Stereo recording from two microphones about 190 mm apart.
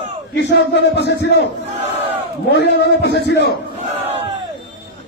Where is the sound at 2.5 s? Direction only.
65° left (ahead or behind).